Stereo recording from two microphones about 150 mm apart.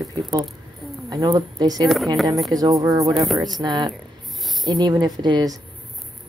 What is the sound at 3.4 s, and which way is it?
Speech, 30° right (ahead or behind).